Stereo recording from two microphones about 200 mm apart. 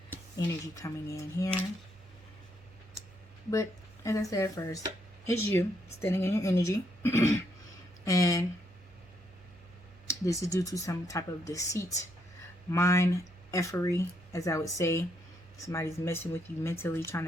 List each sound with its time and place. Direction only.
0.3 s speech: 15° left (ahead or behind)
3.5 s speech: 15° left (ahead or behind)
10.1 s speech: 15° left (ahead or behind)